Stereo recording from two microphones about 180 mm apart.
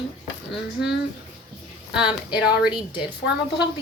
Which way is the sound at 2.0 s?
5° right (ahead or behind).